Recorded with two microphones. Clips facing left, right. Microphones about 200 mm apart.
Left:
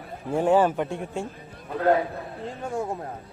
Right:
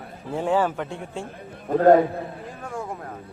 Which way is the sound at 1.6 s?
45° right (ahead or behind).